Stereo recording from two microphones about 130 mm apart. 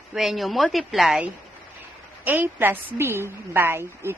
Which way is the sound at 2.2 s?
15° right (ahead or behind).